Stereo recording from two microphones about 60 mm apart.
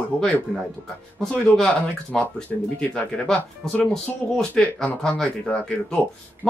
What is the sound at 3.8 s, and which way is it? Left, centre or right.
Speech, centre.